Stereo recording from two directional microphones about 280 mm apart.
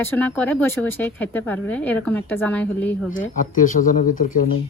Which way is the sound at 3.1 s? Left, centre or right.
Left.